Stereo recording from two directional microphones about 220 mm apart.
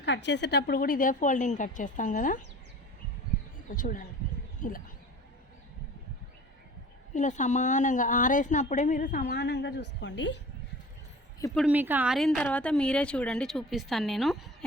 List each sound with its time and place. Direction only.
0.0 s a woman's voice: 50° left (ahead or behind); by 2.4 s 35° left (ahead or behind)
3.7 s a woman's voice: 35° left (ahead or behind)
7.1 s a woman's voice: 35° left (ahead or behind); by 10.3 s 55° left (ahead or behind)
11.5 s speech: 5° right (ahead or behind)